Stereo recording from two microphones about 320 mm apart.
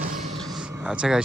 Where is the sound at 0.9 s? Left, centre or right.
Centre.